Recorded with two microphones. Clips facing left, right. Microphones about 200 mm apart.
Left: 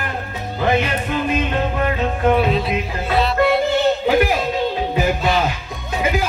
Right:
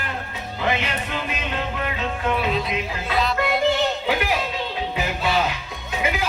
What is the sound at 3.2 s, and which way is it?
Music, 30° left (ahead or behind).